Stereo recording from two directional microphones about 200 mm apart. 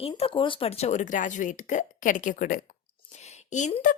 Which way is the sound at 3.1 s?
35° left (ahead or behind).